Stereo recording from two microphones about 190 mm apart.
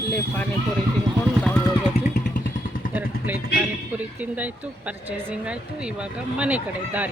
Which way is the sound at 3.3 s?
10° right (ahead or behind).